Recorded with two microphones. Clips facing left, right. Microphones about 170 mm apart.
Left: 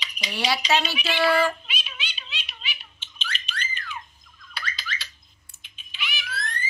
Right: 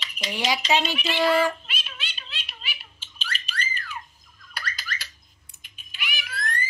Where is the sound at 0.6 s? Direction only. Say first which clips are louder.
Even; centre (ahead or behind).